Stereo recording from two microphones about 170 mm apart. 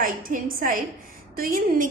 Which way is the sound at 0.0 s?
55° right (ahead or behind).